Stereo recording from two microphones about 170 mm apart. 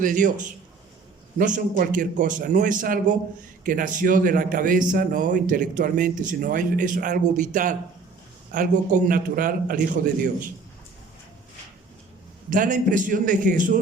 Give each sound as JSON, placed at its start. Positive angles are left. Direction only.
{"t": 0.0, "sound": "a man's voice", "side_deg": -50}
{"t": 1.4, "sound": "a man's voice", "side_deg": -55}
{"t": 12.5, "sound": "a man's voice", "side_deg": -50}